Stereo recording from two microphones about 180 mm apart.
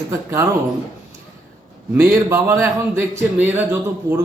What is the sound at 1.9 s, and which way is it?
A man's voice, 10° right (ahead or behind).